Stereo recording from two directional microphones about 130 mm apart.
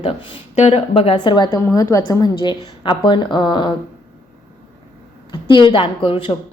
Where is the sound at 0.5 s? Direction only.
50° left (ahead or behind); by 1.5 s 35° left (ahead or behind).